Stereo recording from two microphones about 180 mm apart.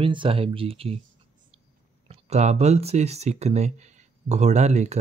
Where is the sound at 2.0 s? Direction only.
35° right (ahead or behind).